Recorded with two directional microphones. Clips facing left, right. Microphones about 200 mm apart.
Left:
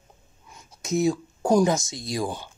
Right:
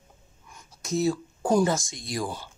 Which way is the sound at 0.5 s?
20° left (ahead or behind).